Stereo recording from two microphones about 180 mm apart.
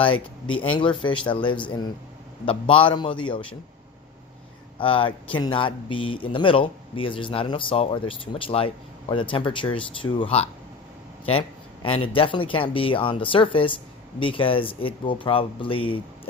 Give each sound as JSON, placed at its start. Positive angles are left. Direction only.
{"t": 0.0, "sound": "speech", "side_deg": 30}
{"t": 4.8, "sound": "speech", "side_deg": 30}